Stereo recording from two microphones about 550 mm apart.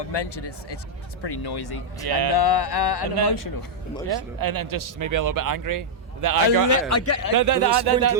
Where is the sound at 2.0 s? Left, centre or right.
Right.